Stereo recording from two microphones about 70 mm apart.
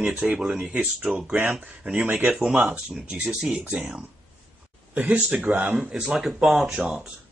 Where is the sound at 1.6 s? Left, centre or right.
Right.